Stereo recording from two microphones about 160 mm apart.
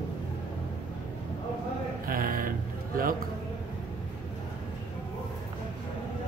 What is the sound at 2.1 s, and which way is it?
A man's voice, 60° right (ahead or behind).